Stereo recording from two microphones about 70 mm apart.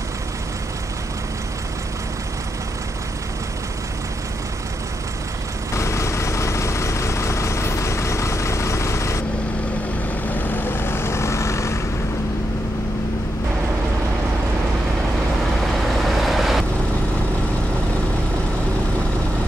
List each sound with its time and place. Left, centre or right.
5.8 s vehicle: left
10.3 s vehicle: left
15.7 s vehicle: centre